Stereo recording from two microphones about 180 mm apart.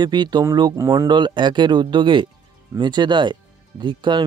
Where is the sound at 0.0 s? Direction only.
25° right (ahead or behind).